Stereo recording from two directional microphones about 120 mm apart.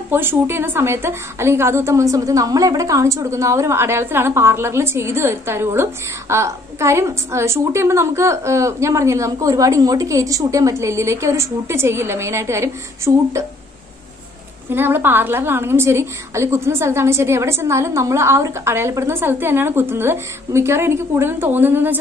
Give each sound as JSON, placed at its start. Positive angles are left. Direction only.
{"t": 0.1, "sound": "a woman's voice", "side_deg": -20}
{"t": 14.7, "sound": "a woman's voice", "side_deg": -20}